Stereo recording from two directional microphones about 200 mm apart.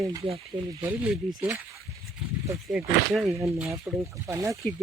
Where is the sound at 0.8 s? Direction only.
10° right (ahead or behind).